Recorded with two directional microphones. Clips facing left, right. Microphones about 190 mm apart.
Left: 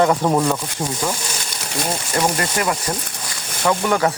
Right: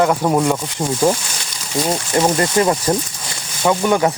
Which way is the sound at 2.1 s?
25° right (ahead or behind).